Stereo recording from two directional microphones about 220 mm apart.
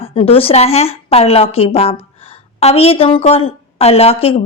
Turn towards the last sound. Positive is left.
turn(degrees=25)  # may be behind; listen again after turning